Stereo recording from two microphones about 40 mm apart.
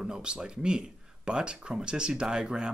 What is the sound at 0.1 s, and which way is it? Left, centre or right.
Speech, right.